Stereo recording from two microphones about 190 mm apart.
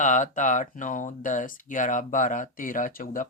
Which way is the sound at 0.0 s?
40° left (ahead or behind).